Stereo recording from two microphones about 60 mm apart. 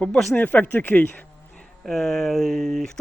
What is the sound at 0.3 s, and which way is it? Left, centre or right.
Speech, left.